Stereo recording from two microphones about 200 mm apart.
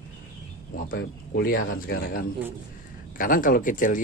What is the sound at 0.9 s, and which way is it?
Speech, 55° left (ahead or behind).